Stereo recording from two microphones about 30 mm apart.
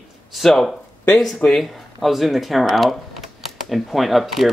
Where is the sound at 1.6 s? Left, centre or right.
Centre.